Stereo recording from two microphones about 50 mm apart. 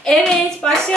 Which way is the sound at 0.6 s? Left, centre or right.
Centre.